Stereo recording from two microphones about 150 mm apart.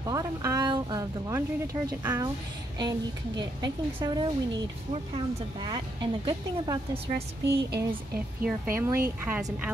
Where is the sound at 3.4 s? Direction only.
25° right (ahead or behind).